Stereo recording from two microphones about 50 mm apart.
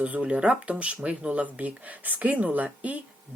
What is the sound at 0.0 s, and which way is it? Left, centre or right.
Speech, right.